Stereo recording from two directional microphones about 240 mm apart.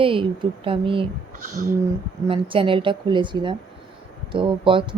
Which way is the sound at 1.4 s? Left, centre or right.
Right.